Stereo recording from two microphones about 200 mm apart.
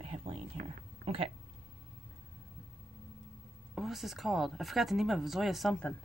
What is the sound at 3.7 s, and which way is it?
Speech, centre (ahead or behind).